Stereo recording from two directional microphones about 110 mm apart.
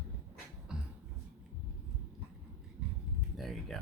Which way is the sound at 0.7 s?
5° right (ahead or behind).